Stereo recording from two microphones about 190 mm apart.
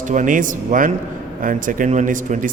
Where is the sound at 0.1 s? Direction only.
45° right (ahead or behind).